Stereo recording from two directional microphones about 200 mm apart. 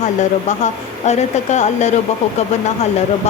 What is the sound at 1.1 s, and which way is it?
Speech, 35° left (ahead or behind).